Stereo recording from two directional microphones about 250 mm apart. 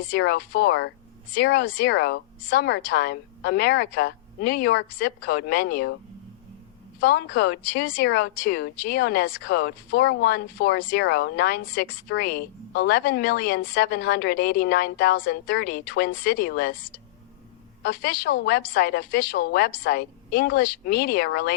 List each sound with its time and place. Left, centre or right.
0.1 s speech: left
7.0 s speech: left
17.8 s speech: left